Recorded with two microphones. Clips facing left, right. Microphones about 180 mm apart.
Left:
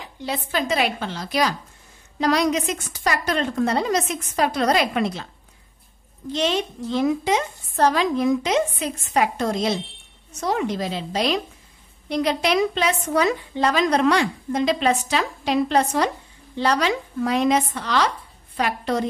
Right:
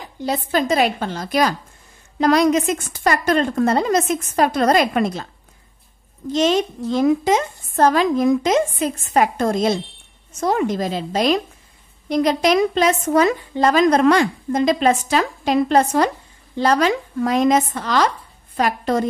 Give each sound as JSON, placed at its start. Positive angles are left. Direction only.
{"t": 0.0, "sound": "a woman's voice", "side_deg": -45}
{"t": 6.3, "sound": "a woman's voice", "side_deg": -45}